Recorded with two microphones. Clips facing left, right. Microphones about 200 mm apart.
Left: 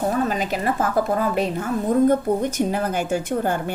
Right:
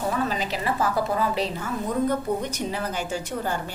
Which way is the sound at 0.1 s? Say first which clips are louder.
Left 4 dB; 50° left (ahead or behind).